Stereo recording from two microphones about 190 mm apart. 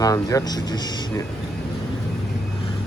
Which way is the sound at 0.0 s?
20° left (ahead or behind).